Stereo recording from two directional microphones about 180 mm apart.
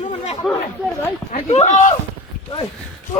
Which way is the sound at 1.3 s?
40° left (ahead or behind).